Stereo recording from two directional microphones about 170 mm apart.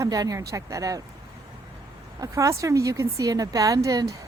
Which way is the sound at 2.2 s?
20° right (ahead or behind).